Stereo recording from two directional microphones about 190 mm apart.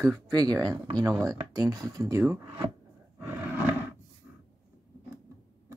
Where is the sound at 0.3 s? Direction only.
20° right (ahead or behind).